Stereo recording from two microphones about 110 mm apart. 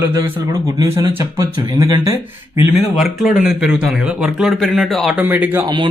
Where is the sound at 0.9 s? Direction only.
30° right (ahead or behind).